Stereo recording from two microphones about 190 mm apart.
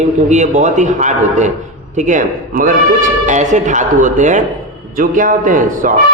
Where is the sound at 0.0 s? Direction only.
40° right (ahead or behind).